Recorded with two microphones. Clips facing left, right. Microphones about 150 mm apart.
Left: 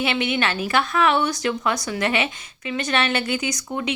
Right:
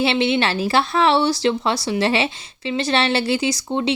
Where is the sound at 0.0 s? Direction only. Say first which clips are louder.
Right 4 dB; 30° right (ahead or behind).